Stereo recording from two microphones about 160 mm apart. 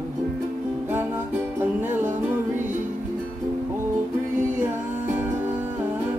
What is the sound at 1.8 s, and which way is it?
Music, 10° right (ahead or behind).